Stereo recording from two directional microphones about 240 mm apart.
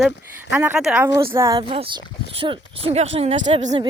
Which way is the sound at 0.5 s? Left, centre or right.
Centre.